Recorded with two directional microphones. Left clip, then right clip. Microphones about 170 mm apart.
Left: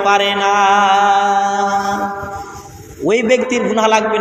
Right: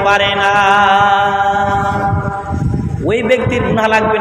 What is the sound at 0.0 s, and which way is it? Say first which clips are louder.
Mantra: right 2 dB; 25° left (ahead or behind).